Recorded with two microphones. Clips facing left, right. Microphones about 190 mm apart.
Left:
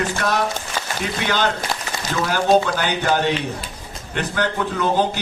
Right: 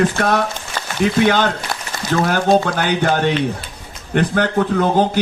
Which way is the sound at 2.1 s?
50° right (ahead or behind).